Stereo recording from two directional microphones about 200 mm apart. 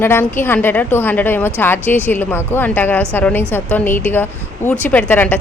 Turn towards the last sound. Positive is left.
turn(degrees=10)  # may be behind; listen again after turning